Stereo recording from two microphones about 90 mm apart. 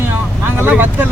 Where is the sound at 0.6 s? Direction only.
20° right (ahead or behind).